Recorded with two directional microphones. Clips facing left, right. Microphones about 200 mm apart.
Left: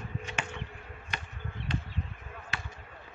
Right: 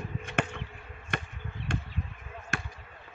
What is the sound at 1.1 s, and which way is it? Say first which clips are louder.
Insect: right 6 dB; 50° right (ahead or behind).